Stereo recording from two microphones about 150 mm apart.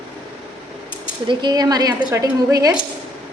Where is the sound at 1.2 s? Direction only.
30° right (ahead or behind).